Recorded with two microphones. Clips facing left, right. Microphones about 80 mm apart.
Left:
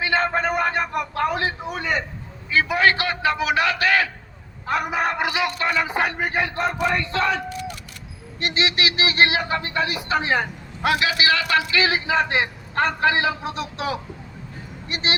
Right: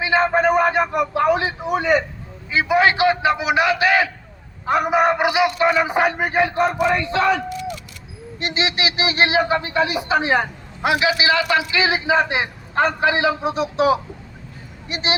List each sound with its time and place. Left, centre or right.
0.0 s a man's voice: centre
8.4 s a man's voice: right